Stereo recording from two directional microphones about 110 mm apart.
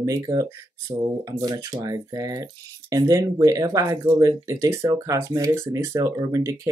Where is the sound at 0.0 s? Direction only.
30° right (ahead or behind).